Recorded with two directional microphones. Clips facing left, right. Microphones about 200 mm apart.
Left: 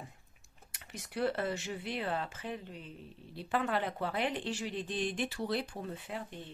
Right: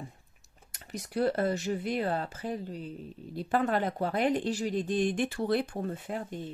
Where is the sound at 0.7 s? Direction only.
40° right (ahead or behind).